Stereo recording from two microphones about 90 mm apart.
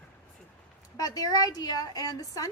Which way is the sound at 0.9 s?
45° left (ahead or behind).